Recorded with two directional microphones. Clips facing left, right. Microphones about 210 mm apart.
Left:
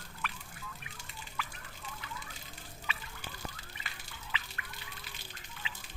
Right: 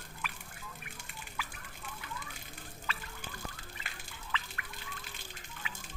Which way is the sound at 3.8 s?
50° right (ahead or behind).